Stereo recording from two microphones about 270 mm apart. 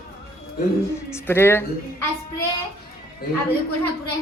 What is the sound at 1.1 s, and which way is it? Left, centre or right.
Speech, centre.